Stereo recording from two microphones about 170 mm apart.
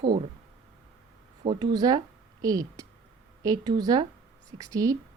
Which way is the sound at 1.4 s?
30° right (ahead or behind).